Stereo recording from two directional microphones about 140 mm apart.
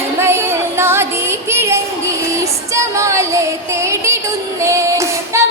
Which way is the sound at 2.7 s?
20° right (ahead or behind).